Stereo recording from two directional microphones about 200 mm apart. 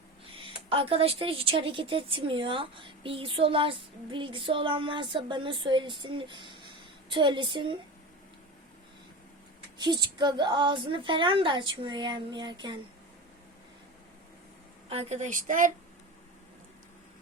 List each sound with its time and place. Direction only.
0.4 s speech: 25° right (ahead or behind)
9.7 s speech: 20° right (ahead or behind)
14.8 s a woman's voice: 30° right (ahead or behind)